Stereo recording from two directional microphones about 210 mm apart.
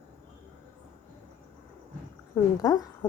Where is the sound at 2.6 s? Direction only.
15° left (ahead or behind).